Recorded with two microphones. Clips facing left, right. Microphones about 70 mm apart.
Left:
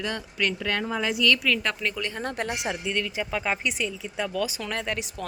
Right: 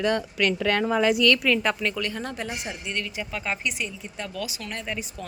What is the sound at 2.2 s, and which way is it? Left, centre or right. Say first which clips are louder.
Speech: left 2 dB; left.